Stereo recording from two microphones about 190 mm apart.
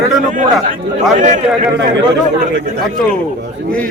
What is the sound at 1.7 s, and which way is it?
Speech, 70° right (ahead or behind).